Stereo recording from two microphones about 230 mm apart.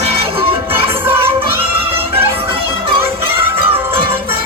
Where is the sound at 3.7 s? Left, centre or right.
Right.